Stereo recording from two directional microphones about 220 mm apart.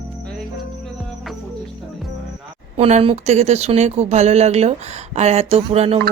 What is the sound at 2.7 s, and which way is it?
Speech, 30° right (ahead or behind).